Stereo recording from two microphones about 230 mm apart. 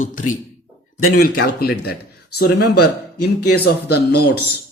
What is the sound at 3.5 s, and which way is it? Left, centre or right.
Speech, left.